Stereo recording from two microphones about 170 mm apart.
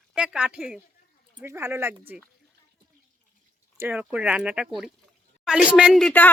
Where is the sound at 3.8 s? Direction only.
10° right (ahead or behind).